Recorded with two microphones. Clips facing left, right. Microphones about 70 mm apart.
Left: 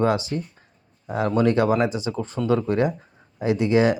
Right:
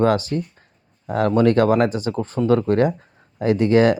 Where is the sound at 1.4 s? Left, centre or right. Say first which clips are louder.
Right 3 dB; right.